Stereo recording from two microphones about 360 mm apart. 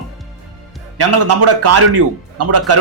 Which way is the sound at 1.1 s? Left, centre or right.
Right.